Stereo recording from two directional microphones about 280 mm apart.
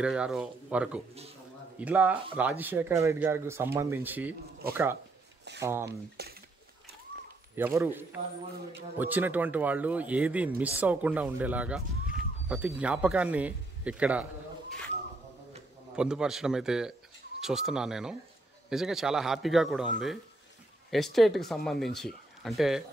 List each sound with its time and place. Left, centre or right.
0.0 s speech: centre
4.6 s speech: right
5.6 s speech: centre
5.9 s speech: right
7.5 s speech: centre
16.0 s speech: centre